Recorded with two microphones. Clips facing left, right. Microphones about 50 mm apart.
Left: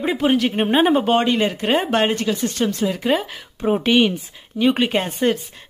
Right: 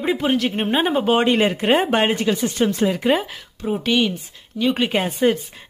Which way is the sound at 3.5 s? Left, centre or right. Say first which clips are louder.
Left 3 dB; left.